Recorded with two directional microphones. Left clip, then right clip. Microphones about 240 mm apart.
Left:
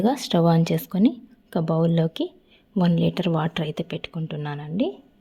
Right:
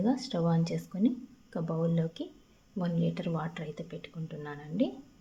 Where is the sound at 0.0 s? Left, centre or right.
Left.